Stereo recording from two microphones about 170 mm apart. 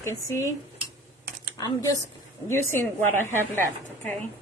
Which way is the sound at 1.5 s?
20° left (ahead or behind).